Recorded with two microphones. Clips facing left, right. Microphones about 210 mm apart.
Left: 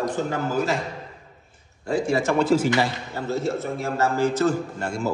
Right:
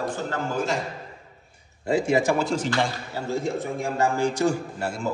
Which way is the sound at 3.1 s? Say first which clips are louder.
Left 1 dB; 10° right (ahead or behind).